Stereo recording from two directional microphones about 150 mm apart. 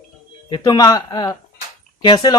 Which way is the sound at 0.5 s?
25° left (ahead or behind).